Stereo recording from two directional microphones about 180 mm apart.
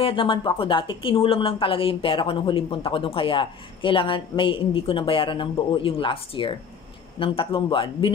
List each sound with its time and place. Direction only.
0.0 s speech: 30° left (ahead or behind)